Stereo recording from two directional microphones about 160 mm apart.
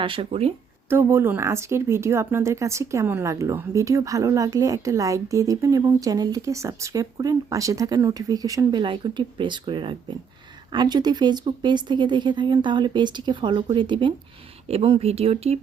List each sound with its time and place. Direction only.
0.0 s speech: 30° right (ahead or behind)
0.9 s speech: 15° right (ahead or behind); by 15.5 s 40° right (ahead or behind)